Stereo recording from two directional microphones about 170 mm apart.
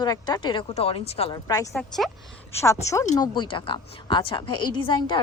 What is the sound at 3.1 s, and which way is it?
A woman's voice, 25° left (ahead or behind).